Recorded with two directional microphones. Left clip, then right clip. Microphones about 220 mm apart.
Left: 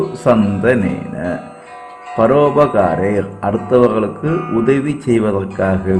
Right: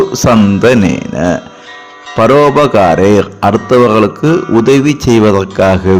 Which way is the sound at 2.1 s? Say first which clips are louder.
Right 5 dB; 25° right (ahead or behind).